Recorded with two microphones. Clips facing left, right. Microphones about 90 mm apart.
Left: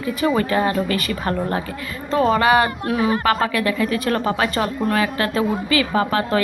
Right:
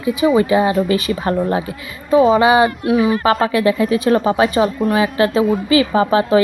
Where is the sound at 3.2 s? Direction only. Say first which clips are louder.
Right 5 dB; 25° right (ahead or behind).